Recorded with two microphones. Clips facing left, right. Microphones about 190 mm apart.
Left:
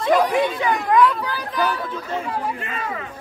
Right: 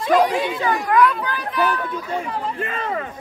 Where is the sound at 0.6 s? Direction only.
20° left (ahead or behind).